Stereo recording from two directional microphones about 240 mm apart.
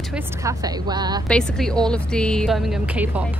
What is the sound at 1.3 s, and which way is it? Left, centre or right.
Speech, centre.